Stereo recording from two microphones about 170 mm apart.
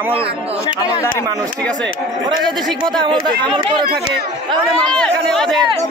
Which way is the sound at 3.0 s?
30° right (ahead or behind).